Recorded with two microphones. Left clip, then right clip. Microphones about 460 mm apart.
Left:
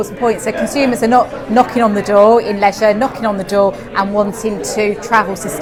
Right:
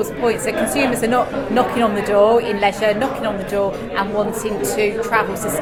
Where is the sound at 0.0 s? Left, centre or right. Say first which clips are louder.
Left 3 dB; left.